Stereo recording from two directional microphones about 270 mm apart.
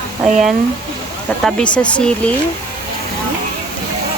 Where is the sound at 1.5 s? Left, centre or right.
Centre.